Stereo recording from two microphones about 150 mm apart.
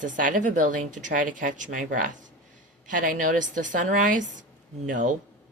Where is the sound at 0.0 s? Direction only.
60° right (ahead or behind).